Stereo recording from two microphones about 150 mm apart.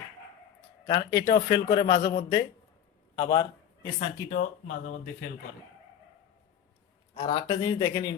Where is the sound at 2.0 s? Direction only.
90° left.